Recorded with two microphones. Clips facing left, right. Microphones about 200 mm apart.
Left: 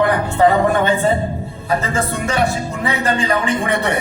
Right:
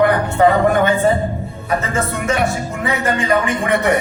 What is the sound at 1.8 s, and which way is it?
Speech, 30° left (ahead or behind).